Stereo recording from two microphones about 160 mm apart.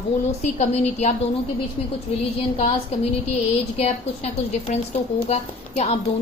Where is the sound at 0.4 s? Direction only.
45° left (ahead or behind).